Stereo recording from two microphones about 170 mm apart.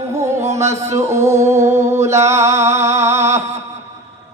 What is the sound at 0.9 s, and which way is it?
Music, 40° right (ahead or behind).